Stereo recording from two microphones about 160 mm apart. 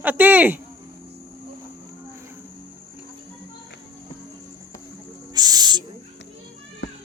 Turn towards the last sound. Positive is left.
turn(degrees=-25)  # may be behind; listen again after turning